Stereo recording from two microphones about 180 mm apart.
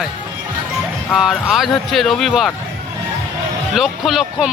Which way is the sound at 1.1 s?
Centre (ahead or behind).